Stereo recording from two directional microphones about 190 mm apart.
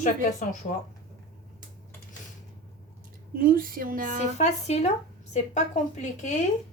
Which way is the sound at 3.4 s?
50° right (ahead or behind).